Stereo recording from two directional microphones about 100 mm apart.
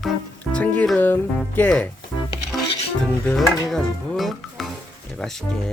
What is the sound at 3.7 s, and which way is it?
Speech, 5° left (ahead or behind).